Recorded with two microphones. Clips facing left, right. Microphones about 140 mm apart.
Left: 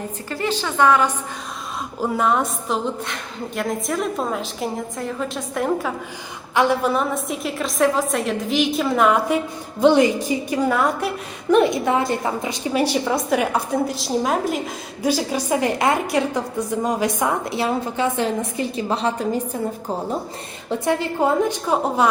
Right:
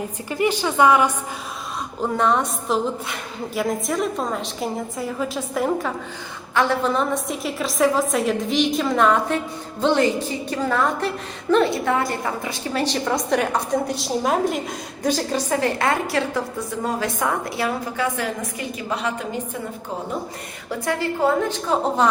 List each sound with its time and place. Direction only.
0.3 s a woman's voice: 15° right (ahead or behind)
2.0 s a woman's voice: 5° left (ahead or behind)
6.5 s a woman's voice: 15° left (ahead or behind); by 19.4 s 35° left (ahead or behind)
20.7 s a woman's voice: 20° left (ahead or behind)